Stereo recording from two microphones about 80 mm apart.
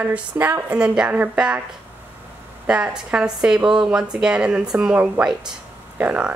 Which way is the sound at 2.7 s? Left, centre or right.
Centre.